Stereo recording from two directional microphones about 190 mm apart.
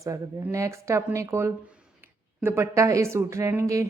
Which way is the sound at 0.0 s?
15° right (ahead or behind).